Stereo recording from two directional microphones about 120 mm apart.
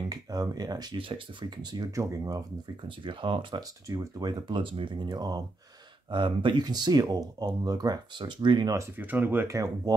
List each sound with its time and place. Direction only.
0.1 s speech: 30° right (ahead or behind)
0.9 s speech: 45° right (ahead or behind); by 2.4 s 30° right (ahead or behind)
3.0 s speech: 45° right (ahead or behind)
3.9 s speech: 35° right (ahead or behind)
8.7 s speech: 15° right (ahead or behind)